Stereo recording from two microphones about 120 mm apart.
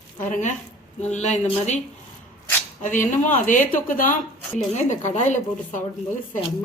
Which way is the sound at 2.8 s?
90° left.